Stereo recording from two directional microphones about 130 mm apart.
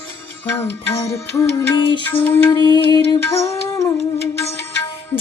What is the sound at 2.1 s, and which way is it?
Music, 15° left (ahead or behind).